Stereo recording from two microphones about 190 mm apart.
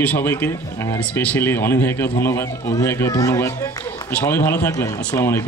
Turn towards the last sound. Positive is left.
turn(degrees=10)  # may be behind; listen again after turning